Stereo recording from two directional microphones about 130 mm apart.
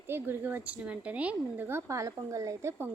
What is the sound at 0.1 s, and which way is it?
A woman's voice, 15° right (ahead or behind).